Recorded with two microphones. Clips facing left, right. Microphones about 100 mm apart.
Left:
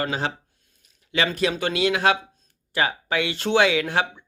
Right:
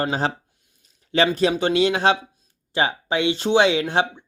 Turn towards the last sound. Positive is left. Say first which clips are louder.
# right 2 dB
turn(degrees=-25)  # may be behind; listen again after turning